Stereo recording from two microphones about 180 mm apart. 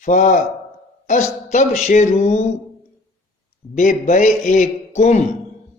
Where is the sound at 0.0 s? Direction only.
45° left (ahead or behind).